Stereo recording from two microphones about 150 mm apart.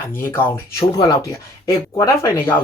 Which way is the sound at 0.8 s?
30° left (ahead or behind).